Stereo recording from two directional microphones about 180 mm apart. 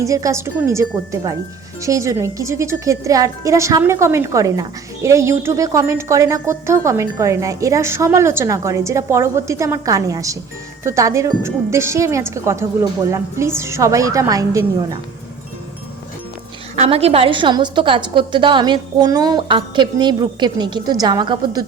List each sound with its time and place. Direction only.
0.0 s a woman's voice: 15° right (ahead or behind)
16.7 s a woman's voice: 35° right (ahead or behind)